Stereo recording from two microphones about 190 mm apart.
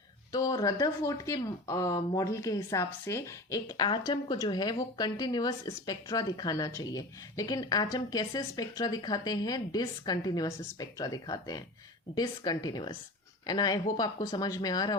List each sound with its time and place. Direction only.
0.3 s speech: 20° left (ahead or behind)